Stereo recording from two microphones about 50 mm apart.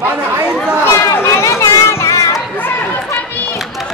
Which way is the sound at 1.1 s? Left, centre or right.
Left.